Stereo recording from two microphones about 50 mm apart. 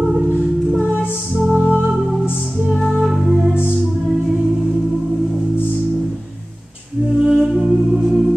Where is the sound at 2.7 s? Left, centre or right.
Centre.